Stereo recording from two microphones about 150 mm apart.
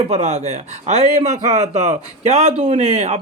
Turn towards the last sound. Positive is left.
turn(degrees=-45)  # may be behind; listen again after turning